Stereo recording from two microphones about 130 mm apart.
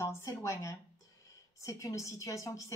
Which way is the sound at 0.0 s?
20° left (ahead or behind).